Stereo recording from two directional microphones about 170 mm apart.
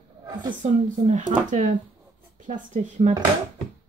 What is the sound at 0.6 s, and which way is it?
Speech, 45° right (ahead or behind).